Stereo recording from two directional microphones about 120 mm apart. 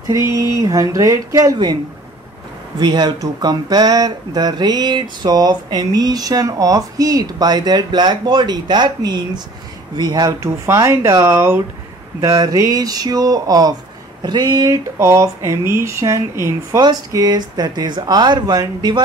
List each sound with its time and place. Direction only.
0.3 s speech: 25° right (ahead or behind)
2.8 s speech: 35° right (ahead or behind)